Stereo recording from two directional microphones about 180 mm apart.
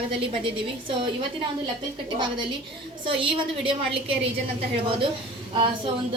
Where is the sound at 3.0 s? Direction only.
30° right (ahead or behind).